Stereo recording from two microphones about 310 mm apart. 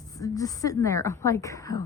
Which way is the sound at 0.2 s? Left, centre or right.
Centre.